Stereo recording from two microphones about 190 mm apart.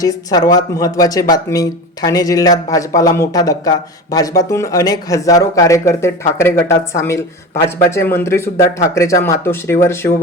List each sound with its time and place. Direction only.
0.0 s speech: 20° left (ahead or behind)